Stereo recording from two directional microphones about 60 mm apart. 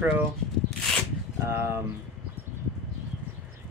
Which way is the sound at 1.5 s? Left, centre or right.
Right.